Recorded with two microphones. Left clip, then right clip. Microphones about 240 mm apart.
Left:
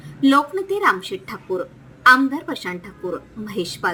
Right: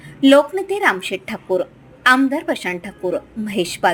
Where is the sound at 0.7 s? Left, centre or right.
Centre.